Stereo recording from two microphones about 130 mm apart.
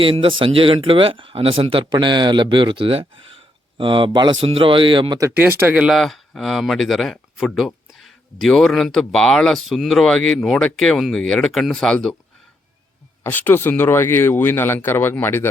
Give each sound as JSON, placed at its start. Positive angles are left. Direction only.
{"t": 0.0, "sound": "speech", "side_deg": -45}
{"t": 4.4, "sound": "speech", "side_deg": -50}
{"t": 5.3, "sound": "speech", "side_deg": -15}
{"t": 6.0, "sound": "speech", "side_deg": 0}
{"t": 13.2, "sound": "speech", "side_deg": 15}